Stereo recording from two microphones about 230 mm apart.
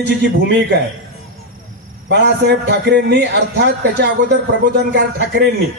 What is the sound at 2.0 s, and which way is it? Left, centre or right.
A man's voice, right.